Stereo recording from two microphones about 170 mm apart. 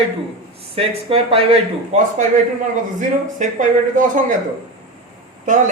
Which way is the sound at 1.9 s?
45° right (ahead or behind).